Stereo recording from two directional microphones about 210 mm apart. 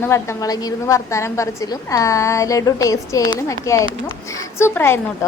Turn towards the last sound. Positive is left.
turn(degrees=10)  # may be behind; listen again after turning